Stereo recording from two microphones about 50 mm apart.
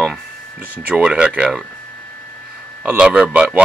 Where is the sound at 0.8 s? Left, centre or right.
Right.